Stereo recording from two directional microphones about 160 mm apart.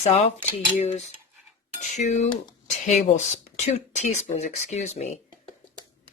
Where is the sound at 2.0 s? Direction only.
50° left (ahead or behind).